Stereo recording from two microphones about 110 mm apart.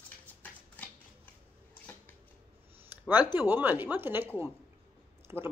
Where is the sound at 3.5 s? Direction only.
15° right (ahead or behind).